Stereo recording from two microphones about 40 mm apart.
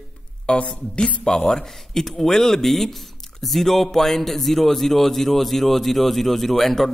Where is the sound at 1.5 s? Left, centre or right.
Centre.